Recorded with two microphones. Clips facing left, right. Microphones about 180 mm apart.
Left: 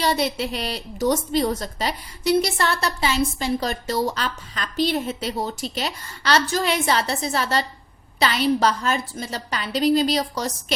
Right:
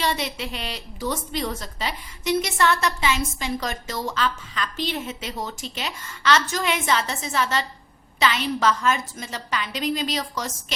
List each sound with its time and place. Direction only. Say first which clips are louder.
0.0 s a woman's voice: left 4 dB; 35° left (ahead or behind)